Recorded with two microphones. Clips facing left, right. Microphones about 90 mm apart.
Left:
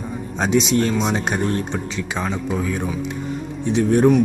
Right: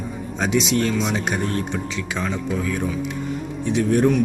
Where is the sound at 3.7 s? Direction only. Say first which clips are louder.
Left 2 dB; 30° left (ahead or behind).